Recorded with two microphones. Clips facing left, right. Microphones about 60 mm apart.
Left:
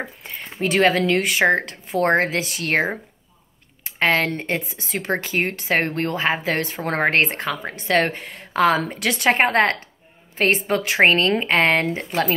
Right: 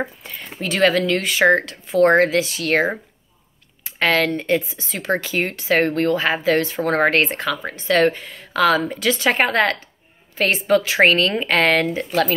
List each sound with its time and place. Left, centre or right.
0.2 s speech: left
4.0 s speech: left